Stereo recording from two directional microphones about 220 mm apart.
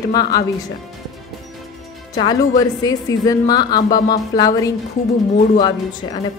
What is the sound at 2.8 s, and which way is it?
A woman's voice, 15° left (ahead or behind).